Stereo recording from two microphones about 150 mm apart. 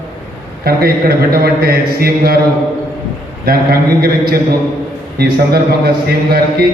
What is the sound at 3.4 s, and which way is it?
Speech, 90° right.